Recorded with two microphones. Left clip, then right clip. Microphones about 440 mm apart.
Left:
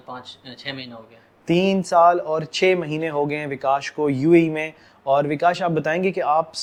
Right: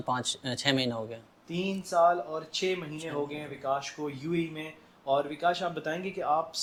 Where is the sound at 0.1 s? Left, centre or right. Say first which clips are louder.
Right 5 dB; right.